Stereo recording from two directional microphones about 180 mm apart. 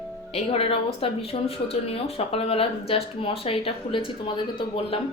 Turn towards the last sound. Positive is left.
turn(degrees=30)  # may be behind; listen again after turning